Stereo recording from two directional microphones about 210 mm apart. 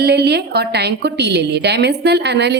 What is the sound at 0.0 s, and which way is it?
A woman's voice, 50° right (ahead or behind).